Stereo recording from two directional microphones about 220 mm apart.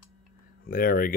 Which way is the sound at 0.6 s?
40° left (ahead or behind).